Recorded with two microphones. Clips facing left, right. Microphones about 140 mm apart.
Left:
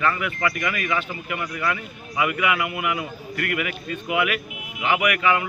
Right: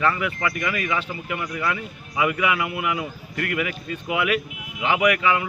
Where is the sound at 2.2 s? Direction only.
25° right (ahead or behind).